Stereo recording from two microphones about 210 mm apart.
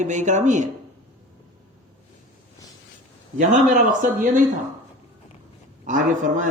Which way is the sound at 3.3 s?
40° right (ahead or behind).